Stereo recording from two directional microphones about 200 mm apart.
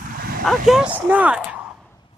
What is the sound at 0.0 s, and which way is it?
Vehicle, 45° right (ahead or behind).